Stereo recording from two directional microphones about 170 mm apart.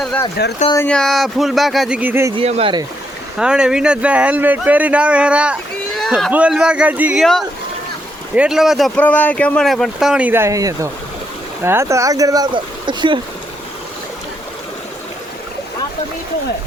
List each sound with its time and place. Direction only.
0.4 s speech: 70° left (ahead or behind)
0.9 s speech: 5° left (ahead or behind); by 2.3 s 10° right (ahead or behind)
2.3 s speech: 35° right (ahead or behind)
3.3 s speech: 5° right (ahead or behind)
8.4 s speech: 5° right (ahead or behind)
9.0 s speech: 10° left (ahead or behind); by 13.1 s 25° right (ahead or behind)